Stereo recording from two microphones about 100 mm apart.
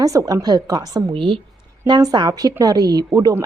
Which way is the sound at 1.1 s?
55° right (ahead or behind).